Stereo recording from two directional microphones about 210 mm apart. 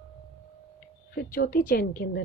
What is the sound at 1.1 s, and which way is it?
A woman's voice, 45° left (ahead or behind).